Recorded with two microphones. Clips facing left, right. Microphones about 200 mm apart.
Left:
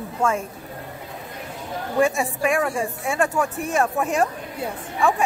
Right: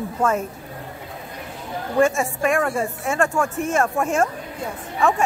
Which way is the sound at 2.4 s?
5° left (ahead or behind).